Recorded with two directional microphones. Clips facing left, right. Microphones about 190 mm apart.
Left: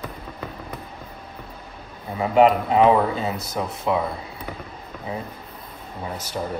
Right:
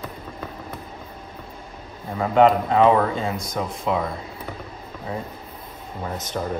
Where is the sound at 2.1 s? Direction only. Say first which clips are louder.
Even; 10° left (ahead or behind).